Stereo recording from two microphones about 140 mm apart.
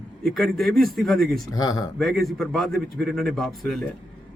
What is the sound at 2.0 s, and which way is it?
A man's voice, centre (ahead or behind).